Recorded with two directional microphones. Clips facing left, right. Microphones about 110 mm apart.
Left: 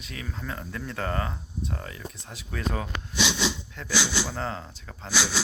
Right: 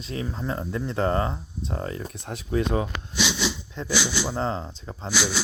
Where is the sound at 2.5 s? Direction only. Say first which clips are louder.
Right 7 dB; 25° right (ahead or behind).